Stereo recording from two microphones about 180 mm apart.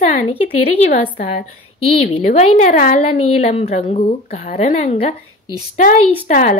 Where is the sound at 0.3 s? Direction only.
35° left (ahead or behind).